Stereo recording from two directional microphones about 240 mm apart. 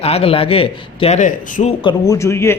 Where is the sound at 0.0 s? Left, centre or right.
Left.